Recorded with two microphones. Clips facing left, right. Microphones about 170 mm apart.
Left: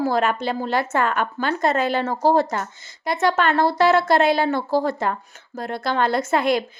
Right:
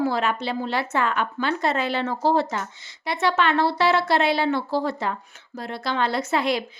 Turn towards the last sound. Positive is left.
turn(degrees=50)  # may be behind; listen again after turning